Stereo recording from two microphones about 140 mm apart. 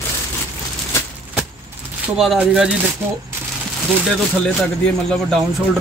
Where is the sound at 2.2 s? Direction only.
5° right (ahead or behind).